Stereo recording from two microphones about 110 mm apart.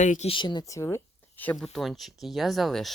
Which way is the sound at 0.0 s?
90° left.